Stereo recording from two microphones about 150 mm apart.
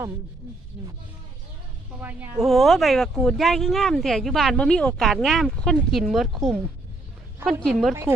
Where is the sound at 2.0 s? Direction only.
10° right (ahead or behind).